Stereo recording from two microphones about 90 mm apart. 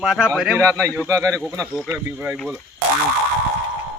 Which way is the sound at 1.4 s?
5° left (ahead or behind).